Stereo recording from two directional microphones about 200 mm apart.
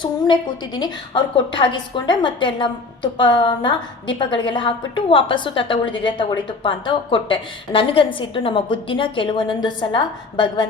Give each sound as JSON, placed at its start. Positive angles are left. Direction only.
{"t": 0.0, "sound": "a woman's voice", "side_deg": 20}